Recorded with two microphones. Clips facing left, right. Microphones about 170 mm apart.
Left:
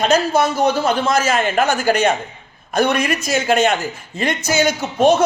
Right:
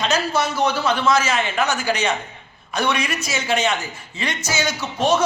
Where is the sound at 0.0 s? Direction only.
50° left (ahead or behind).